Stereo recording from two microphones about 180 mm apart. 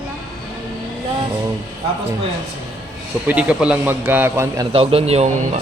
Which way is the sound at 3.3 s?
5° right (ahead or behind).